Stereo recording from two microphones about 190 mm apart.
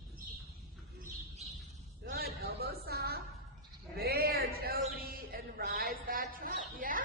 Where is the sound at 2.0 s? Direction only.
55° right (ahead or behind).